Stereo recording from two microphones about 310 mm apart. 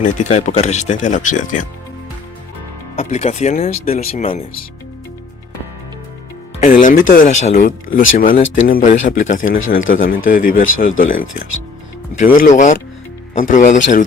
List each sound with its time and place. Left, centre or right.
0.3 s speech: left
2.9 s speech: left
6.6 s speech: left